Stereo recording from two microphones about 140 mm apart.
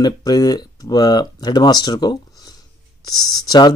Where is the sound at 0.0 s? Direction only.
25° left (ahead or behind).